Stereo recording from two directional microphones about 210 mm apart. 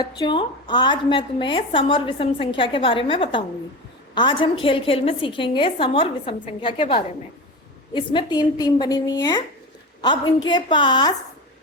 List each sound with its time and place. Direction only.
0.0 s a woman's voice: 25° left (ahead or behind)